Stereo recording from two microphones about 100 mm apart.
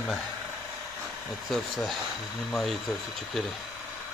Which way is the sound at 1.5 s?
Centre (ahead or behind).